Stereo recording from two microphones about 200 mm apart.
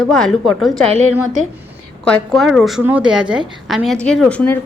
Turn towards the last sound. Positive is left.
turn(degrees=5)  # may be behind; listen again after turning